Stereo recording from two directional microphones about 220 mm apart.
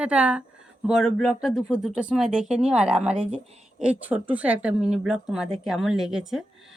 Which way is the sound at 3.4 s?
30° right (ahead or behind).